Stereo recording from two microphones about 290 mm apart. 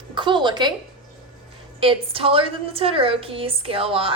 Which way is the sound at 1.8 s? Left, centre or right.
Centre.